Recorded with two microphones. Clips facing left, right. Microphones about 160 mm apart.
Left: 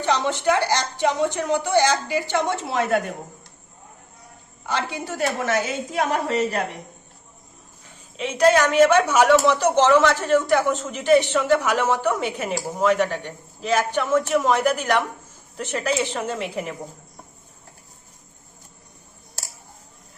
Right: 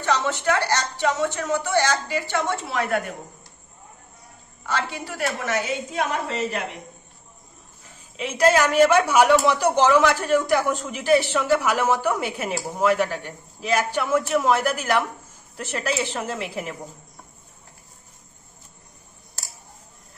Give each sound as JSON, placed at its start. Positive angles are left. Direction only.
{"t": 0.0, "sound": "a woman's voice", "side_deg": 15}
{"t": 4.6, "sound": "a woman's voice", "side_deg": 15}
{"t": 8.1, "sound": "a woman's voice", "side_deg": -5}